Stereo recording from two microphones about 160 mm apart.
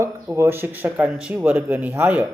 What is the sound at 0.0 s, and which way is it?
A man's voice, 15° right (ahead or behind).